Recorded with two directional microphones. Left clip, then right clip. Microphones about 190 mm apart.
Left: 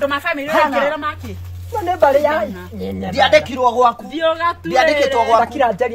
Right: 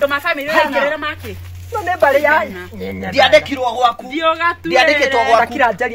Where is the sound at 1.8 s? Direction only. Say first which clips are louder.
Even; 15° left (ahead or behind).